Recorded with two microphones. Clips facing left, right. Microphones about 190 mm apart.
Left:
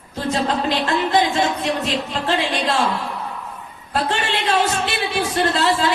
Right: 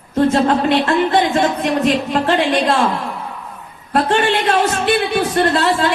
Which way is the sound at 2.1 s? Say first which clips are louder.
Right 6 dB; 65° right (ahead or behind).